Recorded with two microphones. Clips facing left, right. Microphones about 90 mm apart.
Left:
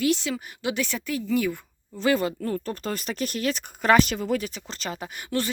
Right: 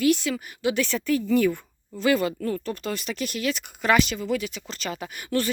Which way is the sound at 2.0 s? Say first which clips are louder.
Right 1 dB; 30° left (ahead or behind).